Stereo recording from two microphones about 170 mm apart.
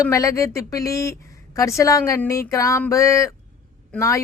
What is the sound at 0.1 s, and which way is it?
A woman's voice, 20° left (ahead or behind).